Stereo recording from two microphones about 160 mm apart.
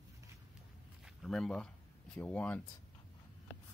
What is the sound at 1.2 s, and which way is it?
Speech, 5° left (ahead or behind).